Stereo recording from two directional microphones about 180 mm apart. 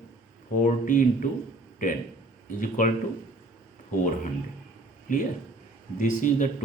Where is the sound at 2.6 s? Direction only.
45° left (ahead or behind).